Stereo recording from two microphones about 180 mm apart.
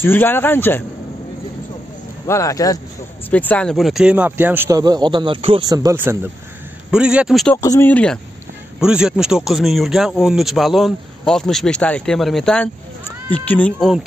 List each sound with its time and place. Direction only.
0.0 s a man's voice: 10° left (ahead or behind)
2.2 s speech: 15° left (ahead or behind); by 7.5 s centre (ahead or behind)
7.5 s a man's voice: 15° left (ahead or behind)
7.9 s a man's voice: 5° left (ahead or behind)